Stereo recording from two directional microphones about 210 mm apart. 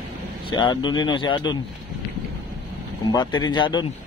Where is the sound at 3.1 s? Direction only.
20° left (ahead or behind).